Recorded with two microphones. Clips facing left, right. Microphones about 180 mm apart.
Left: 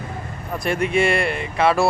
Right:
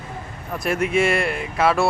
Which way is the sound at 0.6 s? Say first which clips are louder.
Even; centre (ahead or behind).